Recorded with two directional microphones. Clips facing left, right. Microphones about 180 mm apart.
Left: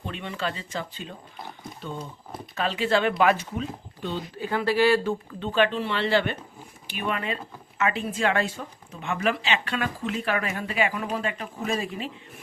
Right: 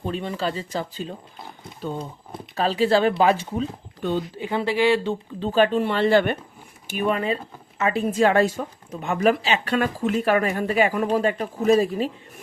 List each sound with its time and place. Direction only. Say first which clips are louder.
0.0 s speech: right 5 dB; 35° right (ahead or behind)
2.6 s speech: right 5 dB; 35° right (ahead or behind)
4.4 s speech: left 3 dB; 20° right (ahead or behind)
5.4 s speech: right 5 dB; 40° right (ahead or behind)